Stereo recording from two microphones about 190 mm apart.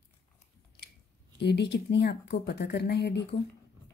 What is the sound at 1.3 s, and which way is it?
Speech, 65° left (ahead or behind).